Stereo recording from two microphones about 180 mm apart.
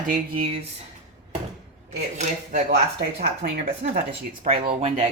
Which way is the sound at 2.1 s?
45° right (ahead or behind).